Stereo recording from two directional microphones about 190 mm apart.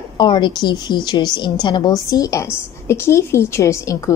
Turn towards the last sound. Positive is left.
turn(degrees=15)  # may be behind; listen again after turning